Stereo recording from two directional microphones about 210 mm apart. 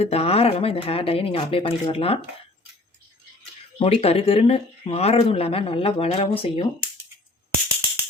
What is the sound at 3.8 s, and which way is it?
Speech, 30° left (ahead or behind).